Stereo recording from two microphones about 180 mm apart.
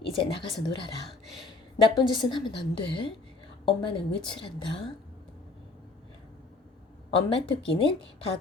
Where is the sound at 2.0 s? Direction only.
25° left (ahead or behind).